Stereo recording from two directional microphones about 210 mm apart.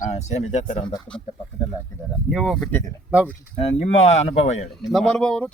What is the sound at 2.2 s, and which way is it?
Speech, centre (ahead or behind).